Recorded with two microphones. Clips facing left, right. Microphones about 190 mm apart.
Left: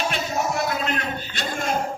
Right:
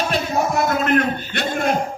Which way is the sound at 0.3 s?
55° right (ahead or behind).